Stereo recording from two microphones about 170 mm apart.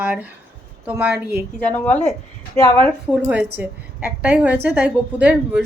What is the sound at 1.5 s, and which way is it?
Speech, 10° left (ahead or behind).